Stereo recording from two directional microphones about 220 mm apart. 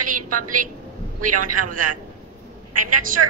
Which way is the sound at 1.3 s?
90° right.